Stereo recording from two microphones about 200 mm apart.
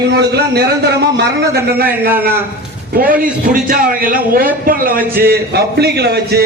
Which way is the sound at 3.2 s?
45° right (ahead or behind).